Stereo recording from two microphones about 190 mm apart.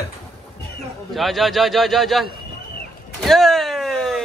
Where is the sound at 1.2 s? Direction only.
Centre (ahead or behind).